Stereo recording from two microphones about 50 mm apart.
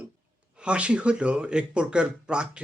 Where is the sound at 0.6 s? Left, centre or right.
Right.